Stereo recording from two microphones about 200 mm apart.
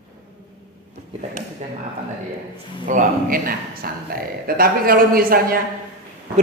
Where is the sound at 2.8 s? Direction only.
40° right (ahead or behind).